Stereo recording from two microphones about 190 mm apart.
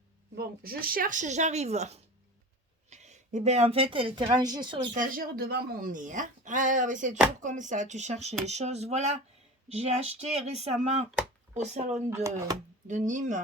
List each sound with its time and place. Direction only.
0.3 s speech: 50° right (ahead or behind); by 4.9 s 25° right (ahead or behind)
4.9 s speech: 50° right (ahead or behind)
12.1 s speech: 15° right (ahead or behind)
12.9 s speech: 40° right (ahead or behind)